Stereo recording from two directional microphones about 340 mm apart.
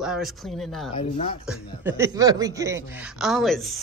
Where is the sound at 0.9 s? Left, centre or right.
Centre.